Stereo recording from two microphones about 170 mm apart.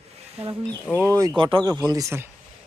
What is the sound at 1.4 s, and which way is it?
Speech, 25° right (ahead or behind).